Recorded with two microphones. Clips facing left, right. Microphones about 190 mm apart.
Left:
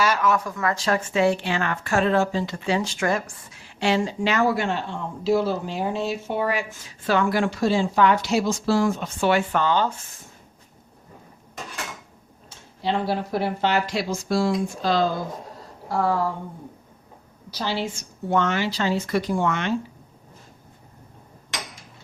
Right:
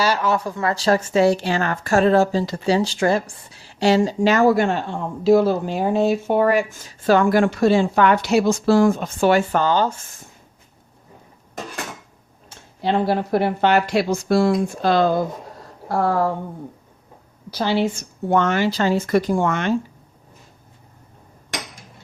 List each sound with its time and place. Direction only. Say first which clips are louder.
0.0 s a woman's voice: right 2 dB; 30° right (ahead or behind)
12.5 s speech: right 4 dB; 55° right (ahead or behind)
17.5 s speech: right 7 dB; 55° right (ahead or behind)